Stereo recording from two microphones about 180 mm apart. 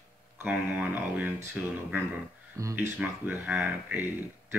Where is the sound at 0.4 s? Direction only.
10° right (ahead or behind).